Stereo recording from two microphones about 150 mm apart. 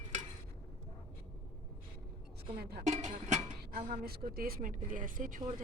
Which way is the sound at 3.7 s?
90° right.